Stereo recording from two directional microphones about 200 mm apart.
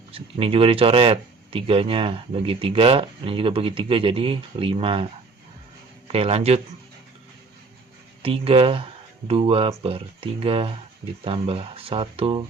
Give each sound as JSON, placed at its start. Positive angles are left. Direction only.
{"t": 0.1, "sound": "speech", "side_deg": -25}
{"t": 6.1, "sound": "a man's voice", "side_deg": -30}
{"t": 8.2, "sound": "speech", "side_deg": -30}